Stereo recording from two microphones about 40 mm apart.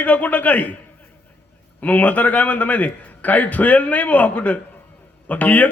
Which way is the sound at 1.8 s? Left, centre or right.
Left.